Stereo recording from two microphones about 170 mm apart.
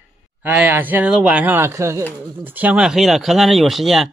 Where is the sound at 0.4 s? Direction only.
10° right (ahead or behind).